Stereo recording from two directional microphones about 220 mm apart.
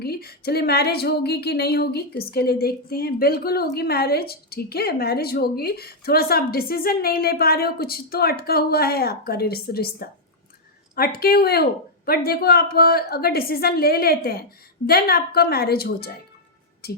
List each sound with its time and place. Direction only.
0.0 s speech: 45° left (ahead or behind)